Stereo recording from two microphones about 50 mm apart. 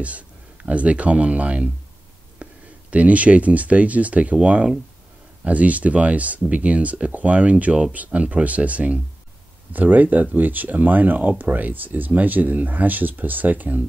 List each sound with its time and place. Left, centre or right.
0.0 s speech: right
2.4 s a sound: right
2.9 s speech: right